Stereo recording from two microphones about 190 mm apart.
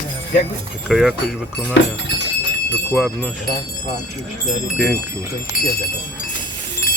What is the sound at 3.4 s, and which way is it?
Speech, 45° left (ahead or behind).